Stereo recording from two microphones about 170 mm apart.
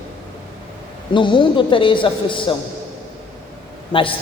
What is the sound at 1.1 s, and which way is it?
A man's voice, 30° left (ahead or behind).